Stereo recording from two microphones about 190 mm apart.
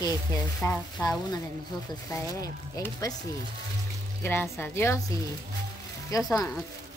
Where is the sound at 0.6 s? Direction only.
15° left (ahead or behind).